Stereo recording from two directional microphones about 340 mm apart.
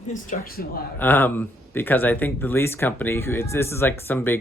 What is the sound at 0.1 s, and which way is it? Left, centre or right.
Speech, left.